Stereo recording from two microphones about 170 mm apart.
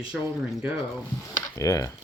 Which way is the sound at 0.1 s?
5° right (ahead or behind).